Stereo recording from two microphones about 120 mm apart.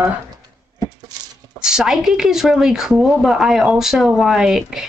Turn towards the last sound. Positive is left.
turn(degrees=-5)  # may be behind; listen again after turning